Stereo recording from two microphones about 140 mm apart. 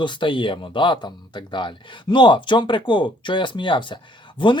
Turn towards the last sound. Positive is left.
turn(degrees=35)  # may be behind; listen again after turning